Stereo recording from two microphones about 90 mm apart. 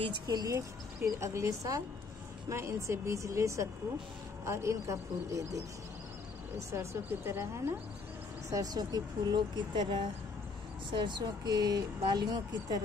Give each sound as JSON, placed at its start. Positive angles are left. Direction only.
{"t": 0.3, "sound": "speech", "side_deg": -40}
{"t": 6.7, "sound": "speech", "side_deg": -30}
{"t": 8.5, "sound": "speech", "side_deg": -40}